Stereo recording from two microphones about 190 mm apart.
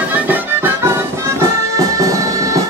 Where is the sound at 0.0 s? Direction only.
10° right (ahead or behind).